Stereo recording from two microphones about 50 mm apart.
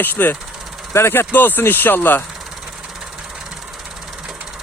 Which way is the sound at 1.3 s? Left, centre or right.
Left.